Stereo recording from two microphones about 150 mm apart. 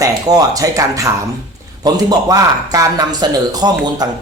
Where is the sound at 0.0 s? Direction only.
25° right (ahead or behind).